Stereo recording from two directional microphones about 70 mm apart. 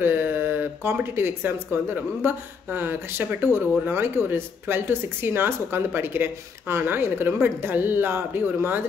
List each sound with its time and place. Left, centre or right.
0.0 s speech: right